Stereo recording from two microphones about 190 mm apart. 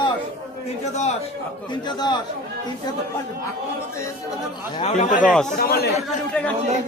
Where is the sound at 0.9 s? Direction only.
35° left (ahead or behind).